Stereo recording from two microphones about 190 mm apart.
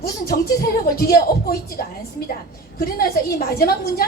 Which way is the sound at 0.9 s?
50° left (ahead or behind).